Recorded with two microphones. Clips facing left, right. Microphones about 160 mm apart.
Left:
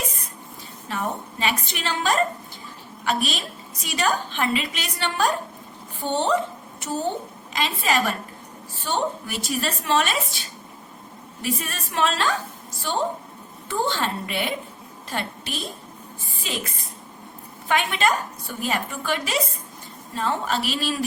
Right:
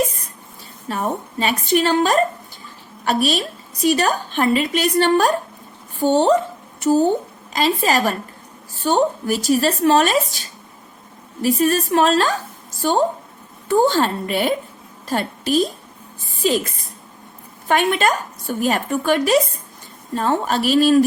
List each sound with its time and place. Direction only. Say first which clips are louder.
0.9 s a woman's voice: right 5 dB; 40° right (ahead or behind)
6.7 s a sound: right 13 dB; 40° right (ahead or behind)
7.5 s a woman's voice: right 6 dB; 40° right (ahead or behind)
17.7 s a woman's voice: right 5 dB; 45° right (ahead or behind)